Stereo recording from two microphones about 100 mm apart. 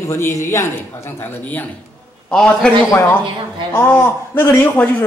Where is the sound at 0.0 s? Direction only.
30° left (ahead or behind).